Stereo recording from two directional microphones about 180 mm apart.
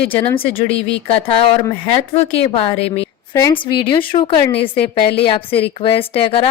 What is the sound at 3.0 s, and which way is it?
A woman's voice, 15° left (ahead or behind).